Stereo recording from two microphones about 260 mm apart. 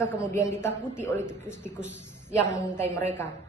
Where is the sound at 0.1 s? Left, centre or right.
Centre.